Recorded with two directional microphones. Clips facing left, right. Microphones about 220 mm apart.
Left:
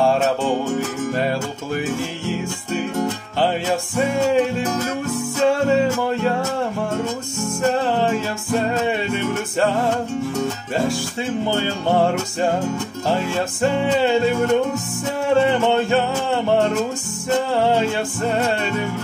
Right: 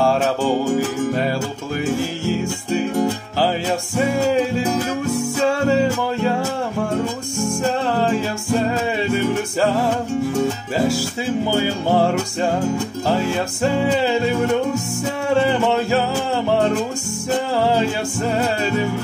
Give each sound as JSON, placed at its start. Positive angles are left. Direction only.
{"t": 0.0, "sound": "music", "side_deg": 0}
{"t": 4.1, "sound": "music", "side_deg": 0}
{"t": 8.0, "sound": "music", "side_deg": 0}
{"t": 11.4, "sound": "music", "side_deg": -10}
{"t": 15.6, "sound": "music", "side_deg": 0}
{"t": 17.6, "sound": "music", "side_deg": 0}